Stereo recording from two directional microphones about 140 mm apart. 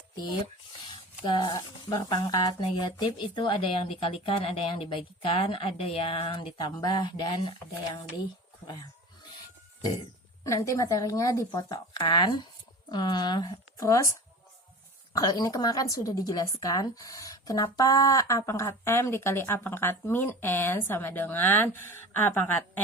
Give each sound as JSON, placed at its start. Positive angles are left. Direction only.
{"t": 1.2, "sound": "speech", "side_deg": 35}
{"t": 10.4, "sound": "a woman's voice", "side_deg": 25}